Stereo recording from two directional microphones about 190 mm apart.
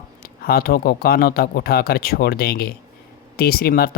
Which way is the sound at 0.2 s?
50° left (ahead or behind).